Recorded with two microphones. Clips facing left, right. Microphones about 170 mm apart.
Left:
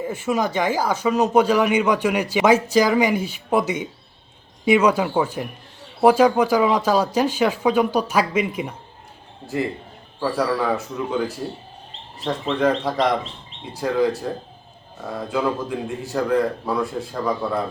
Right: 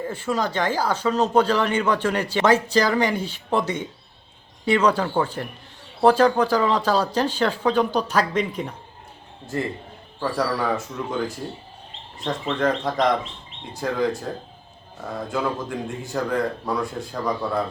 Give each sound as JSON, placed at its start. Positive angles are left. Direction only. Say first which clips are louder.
{"t": 0.0, "sound": "speech", "louder": "left 2 dB", "side_deg": 10}
{"t": 10.2, "sound": "speech", "louder": "left 2 dB", "side_deg": 5}